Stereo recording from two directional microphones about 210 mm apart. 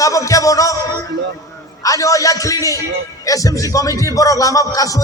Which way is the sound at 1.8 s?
15° left (ahead or behind).